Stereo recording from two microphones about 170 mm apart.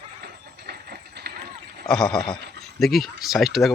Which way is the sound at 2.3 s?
80° right.